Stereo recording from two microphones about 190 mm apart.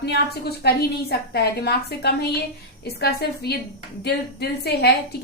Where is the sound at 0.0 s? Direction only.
60° left (ahead or behind).